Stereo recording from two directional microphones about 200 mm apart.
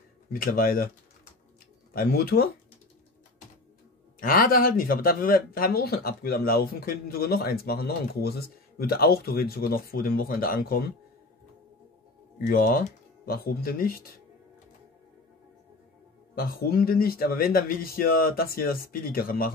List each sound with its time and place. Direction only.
0.3 s speech: 45° left (ahead or behind)
2.0 s speech: 50° left (ahead or behind)
4.2 s speech: 45° left (ahead or behind)
12.4 s speech: 45° left (ahead or behind)
16.3 s speech: 45° left (ahead or behind)